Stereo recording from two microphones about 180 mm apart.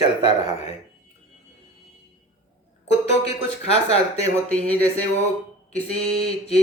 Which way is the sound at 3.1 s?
35° left (ahead or behind).